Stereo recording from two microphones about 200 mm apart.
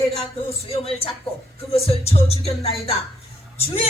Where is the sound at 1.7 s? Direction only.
30° left (ahead or behind).